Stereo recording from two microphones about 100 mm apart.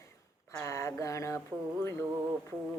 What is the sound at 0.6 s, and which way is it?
Speech, 30° left (ahead or behind).